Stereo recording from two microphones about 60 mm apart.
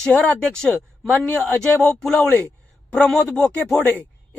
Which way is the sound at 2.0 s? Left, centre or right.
Centre.